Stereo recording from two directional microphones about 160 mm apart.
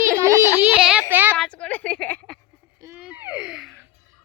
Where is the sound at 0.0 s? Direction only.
15° right (ahead or behind).